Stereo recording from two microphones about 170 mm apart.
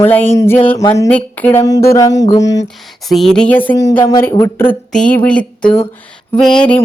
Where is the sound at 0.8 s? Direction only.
20° left (ahead or behind).